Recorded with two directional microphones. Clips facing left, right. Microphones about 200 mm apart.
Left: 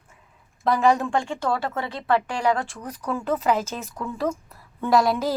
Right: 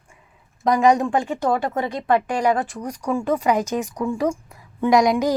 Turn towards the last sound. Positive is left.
turn(degrees=-15)  # may be behind; listen again after turning